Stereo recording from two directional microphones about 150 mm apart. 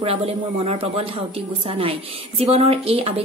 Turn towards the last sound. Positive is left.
turn(degrees=-40)  # may be behind; listen again after turning